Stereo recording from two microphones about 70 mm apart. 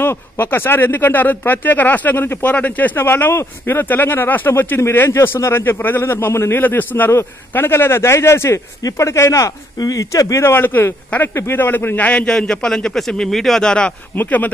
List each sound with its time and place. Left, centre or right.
0.0 s speech: left
9.8 s speech: left
10.4 s a man's voice: left; by 13.9 s centre
14.1 s speech: left